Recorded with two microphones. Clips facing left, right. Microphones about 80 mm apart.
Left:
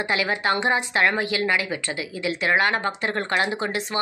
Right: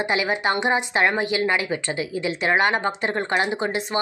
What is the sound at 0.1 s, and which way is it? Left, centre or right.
A woman's voice, right.